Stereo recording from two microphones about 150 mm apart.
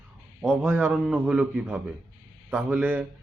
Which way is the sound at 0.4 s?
5° left (ahead or behind).